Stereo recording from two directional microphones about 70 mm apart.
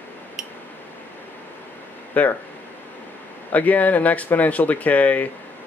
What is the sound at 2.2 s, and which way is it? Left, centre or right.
Speech, left.